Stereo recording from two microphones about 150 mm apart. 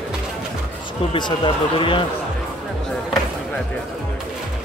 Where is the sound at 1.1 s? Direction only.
30° left (ahead or behind).